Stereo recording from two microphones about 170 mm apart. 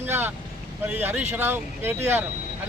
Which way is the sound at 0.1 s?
15° right (ahead or behind).